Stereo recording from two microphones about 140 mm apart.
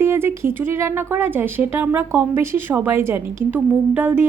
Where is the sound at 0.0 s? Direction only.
15° right (ahead or behind).